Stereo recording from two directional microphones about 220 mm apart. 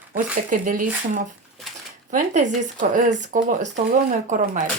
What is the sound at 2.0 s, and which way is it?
Speech, 35° right (ahead or behind).